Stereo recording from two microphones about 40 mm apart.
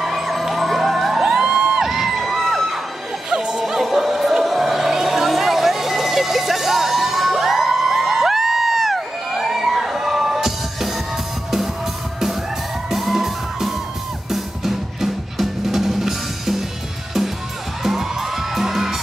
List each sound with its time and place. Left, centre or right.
0.0 s fire engine: centre
1.4 s music: centre
1.9 s crowd: centre
3.3 s music: centre
3.5 s music: centre
12.9 s music: centre
17.8 s music: centre